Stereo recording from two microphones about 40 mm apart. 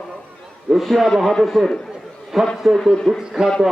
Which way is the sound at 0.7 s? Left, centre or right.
Centre.